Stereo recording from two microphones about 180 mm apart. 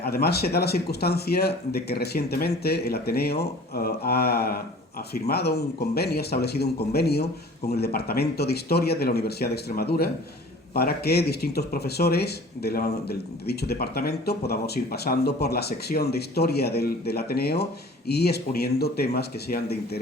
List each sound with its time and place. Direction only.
0.0 s speech: 60° left (ahead or behind)